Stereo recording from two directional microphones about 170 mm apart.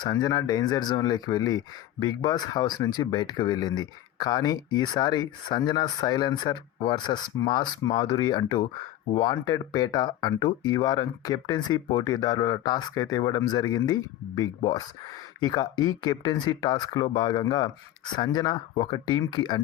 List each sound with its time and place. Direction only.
0.0 s speech: 25° left (ahead or behind)